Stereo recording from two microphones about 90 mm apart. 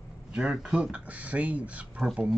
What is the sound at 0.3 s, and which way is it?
Speech, 10° right (ahead or behind).